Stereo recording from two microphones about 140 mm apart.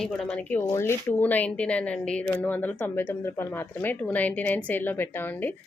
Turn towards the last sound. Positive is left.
turn(degrees=15)  # may be behind; listen again after turning